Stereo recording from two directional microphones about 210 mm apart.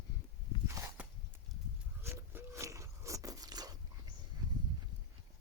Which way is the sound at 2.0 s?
10° right (ahead or behind).